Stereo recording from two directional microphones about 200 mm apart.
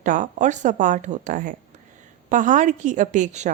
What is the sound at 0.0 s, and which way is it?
A woman's voice, 40° right (ahead or behind).